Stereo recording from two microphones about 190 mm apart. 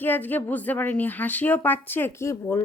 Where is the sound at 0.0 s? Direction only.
10° left (ahead or behind).